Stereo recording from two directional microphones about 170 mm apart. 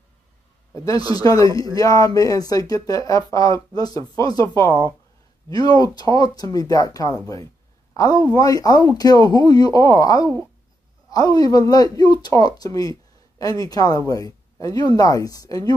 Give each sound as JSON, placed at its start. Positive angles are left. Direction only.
{"t": 0.7, "sound": "speech", "side_deg": 20}